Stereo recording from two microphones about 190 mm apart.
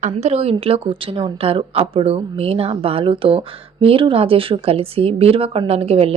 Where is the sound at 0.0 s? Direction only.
35° right (ahead or behind).